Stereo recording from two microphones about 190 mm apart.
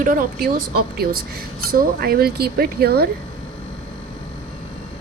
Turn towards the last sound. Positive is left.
turn(degrees=-55)  # may be behind; listen again after turning